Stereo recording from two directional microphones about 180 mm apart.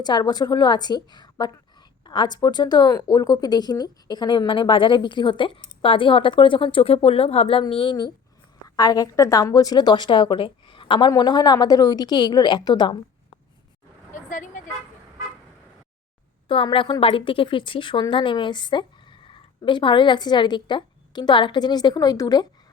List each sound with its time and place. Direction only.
0.0 s a woman's voice: 25° left (ahead or behind)
14.3 s speech: 45° left (ahead or behind)
16.5 s a woman's voice: 30° left (ahead or behind)